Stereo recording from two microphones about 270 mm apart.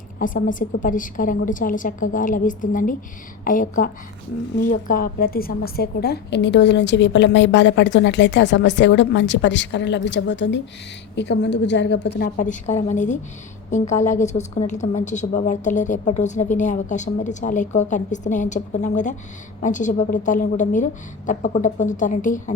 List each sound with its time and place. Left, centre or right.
0.2 s a woman's voice: left